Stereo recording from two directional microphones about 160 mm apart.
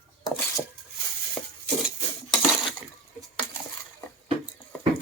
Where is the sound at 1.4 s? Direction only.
5° left (ahead or behind).